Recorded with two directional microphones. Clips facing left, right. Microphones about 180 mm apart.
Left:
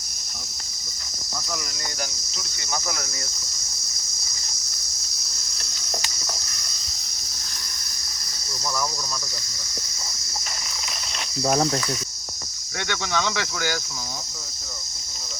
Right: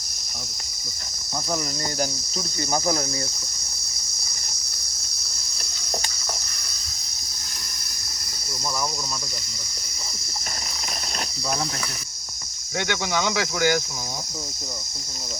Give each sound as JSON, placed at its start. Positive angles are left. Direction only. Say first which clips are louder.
{"t": 2.7, "sound": "insect", "louder": "right 7 dB", "side_deg": -35}
{"t": 11.4, "sound": "cricket", "louder": "left 7 dB", "side_deg": 55}
{"t": 12.9, "sound": "speech", "louder": "right 1 dB", "side_deg": -10}